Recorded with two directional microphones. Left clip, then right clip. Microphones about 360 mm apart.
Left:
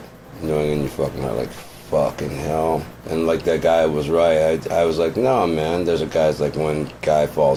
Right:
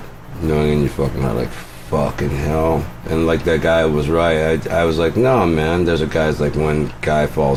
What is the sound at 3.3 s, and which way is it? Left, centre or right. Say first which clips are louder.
Speech: right 1 dB; right.